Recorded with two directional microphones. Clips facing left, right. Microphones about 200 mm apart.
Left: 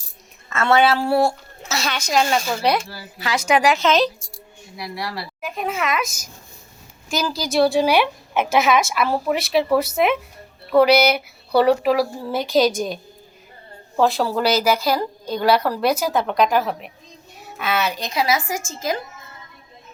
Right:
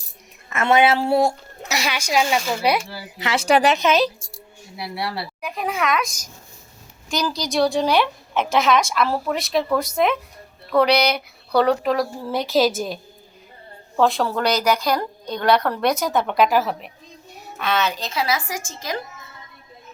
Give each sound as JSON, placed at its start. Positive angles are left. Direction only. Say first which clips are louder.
{"t": 0.5, "sound": "a woman's voice", "louder": "even", "side_deg": -20}
{"t": 2.9, "sound": "speech", "louder": "right 1 dB", "side_deg": -20}
{"t": 3.8, "sound": "a woman's voice", "louder": "even", "side_deg": -10}
{"t": 4.8, "sound": "speech", "louder": "right 1 dB", "side_deg": -25}
{"t": 5.4, "sound": "speech", "louder": "even", "side_deg": 0}